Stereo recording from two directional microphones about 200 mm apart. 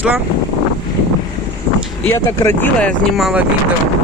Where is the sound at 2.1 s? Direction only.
10° left (ahead or behind).